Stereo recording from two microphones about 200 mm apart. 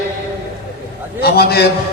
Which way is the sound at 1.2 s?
50° left (ahead or behind).